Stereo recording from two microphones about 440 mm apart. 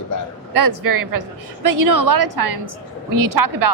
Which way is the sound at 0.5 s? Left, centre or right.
Right.